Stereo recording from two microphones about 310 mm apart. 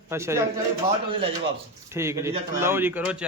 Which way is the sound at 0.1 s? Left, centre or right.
Centre.